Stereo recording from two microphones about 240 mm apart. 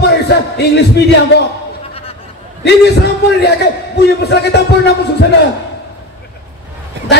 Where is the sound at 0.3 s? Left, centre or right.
Left.